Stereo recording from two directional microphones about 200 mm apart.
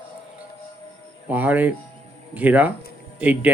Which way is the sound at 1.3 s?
10° right (ahead or behind).